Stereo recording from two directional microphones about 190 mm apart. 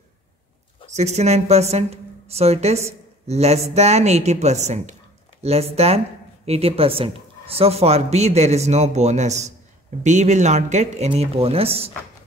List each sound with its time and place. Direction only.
0.9 s a woman's voice: 35° right (ahead or behind)